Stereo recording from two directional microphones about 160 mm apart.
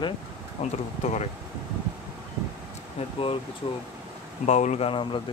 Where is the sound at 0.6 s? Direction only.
45° left (ahead or behind).